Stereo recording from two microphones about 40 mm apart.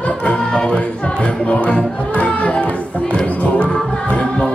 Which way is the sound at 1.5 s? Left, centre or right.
Left.